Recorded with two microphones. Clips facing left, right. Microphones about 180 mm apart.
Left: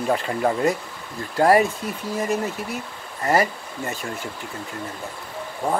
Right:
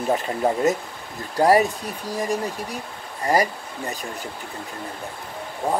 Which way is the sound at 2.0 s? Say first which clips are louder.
Left 1 dB; 15° right (ahead or behind).